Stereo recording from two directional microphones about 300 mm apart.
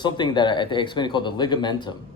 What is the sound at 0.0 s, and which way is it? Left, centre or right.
Speech, centre.